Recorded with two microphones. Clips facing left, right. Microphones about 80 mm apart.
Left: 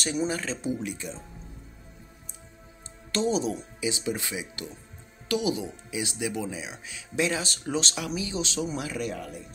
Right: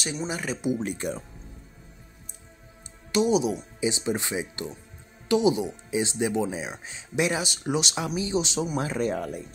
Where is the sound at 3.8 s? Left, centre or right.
Right.